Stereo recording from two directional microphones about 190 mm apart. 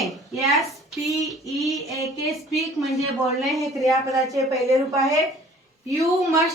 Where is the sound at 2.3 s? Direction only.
Centre (ahead or behind).